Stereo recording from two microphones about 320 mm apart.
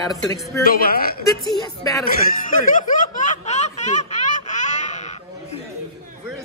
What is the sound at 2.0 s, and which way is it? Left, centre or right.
Speech, left.